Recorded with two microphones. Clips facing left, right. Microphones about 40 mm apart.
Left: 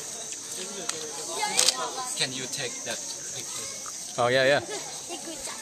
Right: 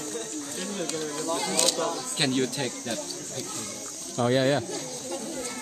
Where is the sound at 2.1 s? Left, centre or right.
Centre.